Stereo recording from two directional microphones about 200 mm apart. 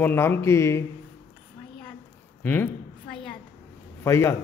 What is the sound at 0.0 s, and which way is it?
Speech, 10° left (ahead or behind).